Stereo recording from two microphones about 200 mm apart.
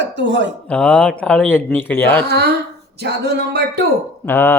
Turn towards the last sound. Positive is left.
turn(degrees=10)  # may be behind; listen again after turning